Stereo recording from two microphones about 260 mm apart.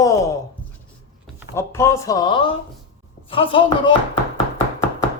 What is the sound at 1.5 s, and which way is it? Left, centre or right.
Speech, centre.